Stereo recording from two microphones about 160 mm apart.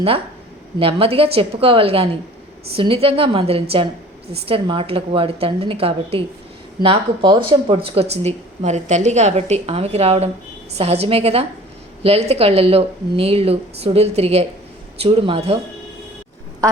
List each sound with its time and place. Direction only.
0.8 s speech: 35° right (ahead or behind)